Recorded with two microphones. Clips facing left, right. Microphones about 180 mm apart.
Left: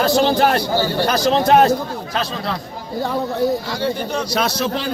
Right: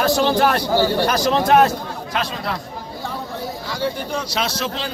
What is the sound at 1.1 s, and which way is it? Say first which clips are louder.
Speech: left 2 dB; 25° left (ahead or behind).